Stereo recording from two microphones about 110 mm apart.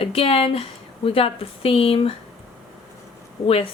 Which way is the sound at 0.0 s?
60° left (ahead or behind).